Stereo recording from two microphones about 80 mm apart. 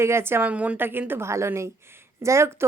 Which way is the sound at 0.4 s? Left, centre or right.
Centre.